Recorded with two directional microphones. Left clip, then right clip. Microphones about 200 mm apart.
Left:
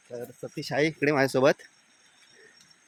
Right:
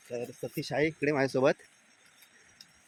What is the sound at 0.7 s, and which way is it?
Speech, 60° left (ahead or behind).